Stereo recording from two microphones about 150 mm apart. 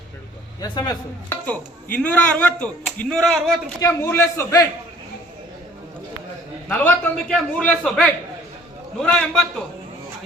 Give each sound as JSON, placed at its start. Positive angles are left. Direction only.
{"t": 0.6, "sound": "a man's voice", "side_deg": 25}
{"t": 1.3, "sound": "speech", "side_deg": 10}
{"t": 3.8, "sound": "speech", "side_deg": 20}
{"t": 6.7, "sound": "a man's voice", "side_deg": 10}